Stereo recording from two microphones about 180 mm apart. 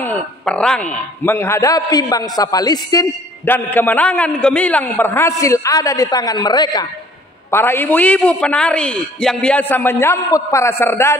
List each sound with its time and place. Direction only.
0.0 s a man's voice: 5° left (ahead or behind); by 6.9 s 25° left (ahead or behind)
7.5 s a man's voice: 10° left (ahead or behind)